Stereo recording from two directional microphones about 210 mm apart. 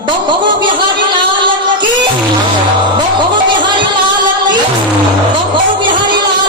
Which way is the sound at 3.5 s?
20° right (ahead or behind).